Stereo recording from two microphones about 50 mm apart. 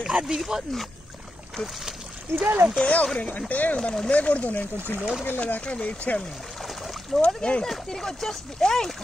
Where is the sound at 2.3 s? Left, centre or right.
Right.